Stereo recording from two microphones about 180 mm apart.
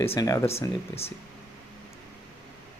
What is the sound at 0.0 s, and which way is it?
Speech, 15° left (ahead or behind).